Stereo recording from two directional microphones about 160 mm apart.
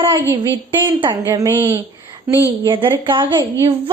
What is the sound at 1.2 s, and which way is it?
Speech, 20° right (ahead or behind).